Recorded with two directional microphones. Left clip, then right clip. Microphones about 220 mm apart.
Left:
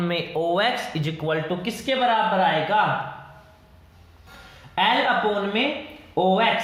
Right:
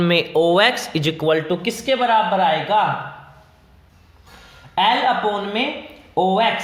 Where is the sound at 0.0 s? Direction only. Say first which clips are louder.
Right 8 dB; 45° right (ahead or behind).